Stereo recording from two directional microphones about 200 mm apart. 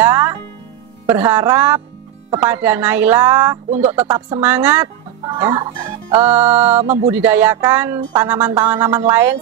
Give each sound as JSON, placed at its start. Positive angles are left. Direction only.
{"t": 0.0, "sound": "music", "side_deg": -15}
{"t": 1.1, "sound": "speech", "side_deg": -15}
{"t": 5.2, "sound": "speech", "side_deg": -20}
{"t": 6.4, "sound": "a sound", "side_deg": -30}
{"t": 7.2, "sound": "speech", "side_deg": -10}